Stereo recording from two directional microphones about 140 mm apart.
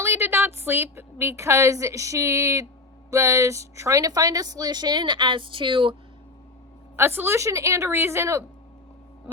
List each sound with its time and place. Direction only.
0.0 s a woman's voice: 20° right (ahead or behind); by 6.0 s 35° right (ahead or behind)
6.9 s a woman's voice: 15° right (ahead or behind)